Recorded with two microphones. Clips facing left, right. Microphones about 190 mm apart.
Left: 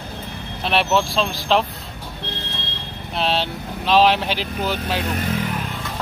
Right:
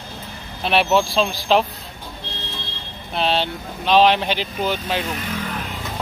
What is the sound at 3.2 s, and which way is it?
Speech, centre (ahead or behind).